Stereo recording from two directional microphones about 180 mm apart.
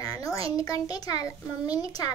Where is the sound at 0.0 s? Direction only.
20° left (ahead or behind).